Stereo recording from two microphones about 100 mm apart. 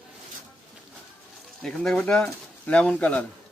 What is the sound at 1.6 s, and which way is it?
Speech, 5° left (ahead or behind).